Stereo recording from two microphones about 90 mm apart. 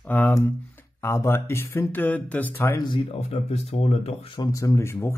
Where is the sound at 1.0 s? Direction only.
30° left (ahead or behind).